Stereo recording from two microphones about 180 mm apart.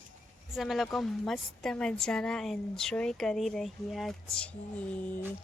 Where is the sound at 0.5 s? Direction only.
Centre (ahead or behind).